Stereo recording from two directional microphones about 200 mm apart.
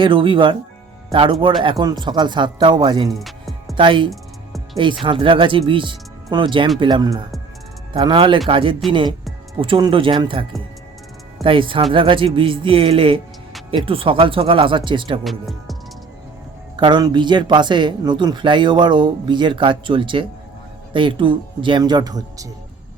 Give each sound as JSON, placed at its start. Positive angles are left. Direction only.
{"t": 0.0, "sound": "speech", "side_deg": -25}
{"t": 3.1, "sound": "music", "side_deg": 0}
{"t": 3.8, "sound": "speech", "side_deg": -25}
{"t": 4.1, "sound": "music", "side_deg": 0}
{"t": 5.0, "sound": "speech", "side_deg": -25}
{"t": 11.4, "sound": "speech", "side_deg": -25}
{"t": 15.2, "sound": "speech", "side_deg": 0}
{"t": 16.7, "sound": "speech", "side_deg": -20}